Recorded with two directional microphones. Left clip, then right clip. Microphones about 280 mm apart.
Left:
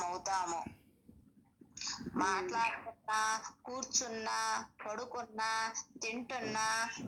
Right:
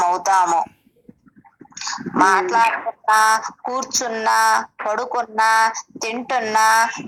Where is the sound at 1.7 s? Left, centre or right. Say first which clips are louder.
Right 17 dB; right.